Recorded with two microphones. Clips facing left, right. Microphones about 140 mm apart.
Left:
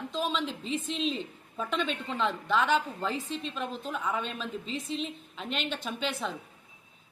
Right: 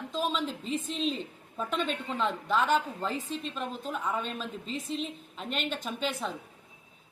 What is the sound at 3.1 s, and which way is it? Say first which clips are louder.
Speech: even; 45° right (ahead or behind).